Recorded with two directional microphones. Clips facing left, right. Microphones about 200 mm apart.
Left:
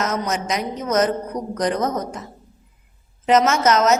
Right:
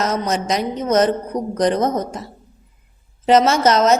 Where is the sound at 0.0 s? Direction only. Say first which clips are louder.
Right 3 dB; 30° right (ahead or behind).